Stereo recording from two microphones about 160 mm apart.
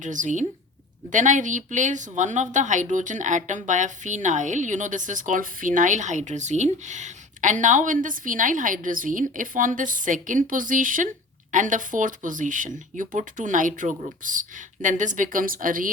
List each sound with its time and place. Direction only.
0.0 s speech: 50° right (ahead or behind)